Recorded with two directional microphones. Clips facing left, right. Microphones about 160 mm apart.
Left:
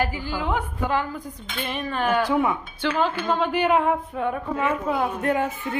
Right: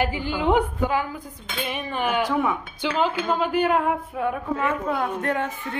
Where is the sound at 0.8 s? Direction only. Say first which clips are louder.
Even; 10° right (ahead or behind).